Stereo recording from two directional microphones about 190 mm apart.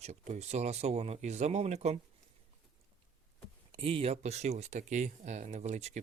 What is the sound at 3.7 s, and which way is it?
Speech, 30° right (ahead or behind).